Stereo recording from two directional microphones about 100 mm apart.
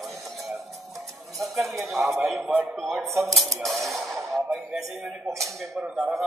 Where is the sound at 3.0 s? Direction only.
30° right (ahead or behind).